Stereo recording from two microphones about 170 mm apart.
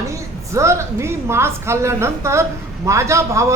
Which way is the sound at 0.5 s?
15° right (ahead or behind).